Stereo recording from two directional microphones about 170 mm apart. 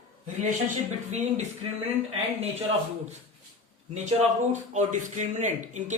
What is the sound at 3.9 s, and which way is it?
Speech, 45° right (ahead or behind).